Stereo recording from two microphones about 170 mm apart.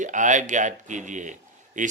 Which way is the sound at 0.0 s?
45° right (ahead or behind).